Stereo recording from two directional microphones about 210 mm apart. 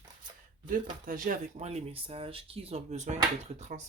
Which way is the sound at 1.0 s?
40° right (ahead or behind).